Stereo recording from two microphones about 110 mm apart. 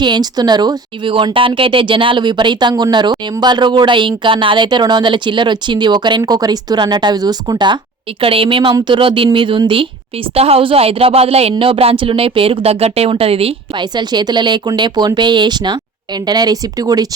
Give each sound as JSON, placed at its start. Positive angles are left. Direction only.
{"t": 0.0, "sound": "speech", "side_deg": -40}
{"t": 8.2, "sound": "speech", "side_deg": -55}
{"t": 10.3, "sound": "speech", "side_deg": -65}
{"t": 13.7, "sound": "speech", "side_deg": -40}